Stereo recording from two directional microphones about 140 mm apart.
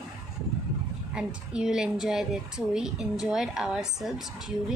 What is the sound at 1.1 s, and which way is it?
Speech, 5° right (ahead or behind).